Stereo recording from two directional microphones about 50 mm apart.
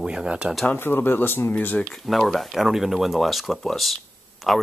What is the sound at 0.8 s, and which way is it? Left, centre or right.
Speech, left.